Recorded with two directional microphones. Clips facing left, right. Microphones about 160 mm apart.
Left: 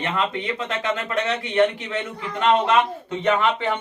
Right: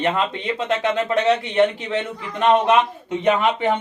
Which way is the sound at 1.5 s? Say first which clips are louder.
Right 2 dB; 25° right (ahead or behind).